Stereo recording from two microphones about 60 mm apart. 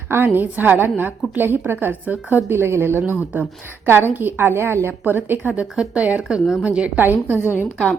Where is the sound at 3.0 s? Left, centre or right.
Right.